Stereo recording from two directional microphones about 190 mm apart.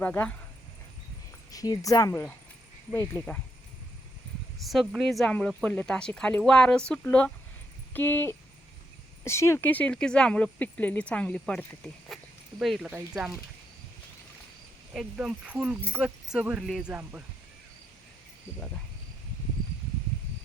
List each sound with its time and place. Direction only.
0.0 s speech: 10° left (ahead or behind)
1.5 s speech: 20° left (ahead or behind)
4.7 s speech: centre (ahead or behind)
14.9 s speech: centre (ahead or behind)